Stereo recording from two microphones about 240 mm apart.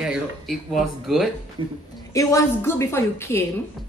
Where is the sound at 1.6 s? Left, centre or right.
Right.